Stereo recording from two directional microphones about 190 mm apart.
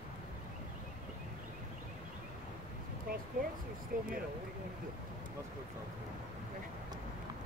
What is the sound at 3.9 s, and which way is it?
Speech, 45° right (ahead or behind).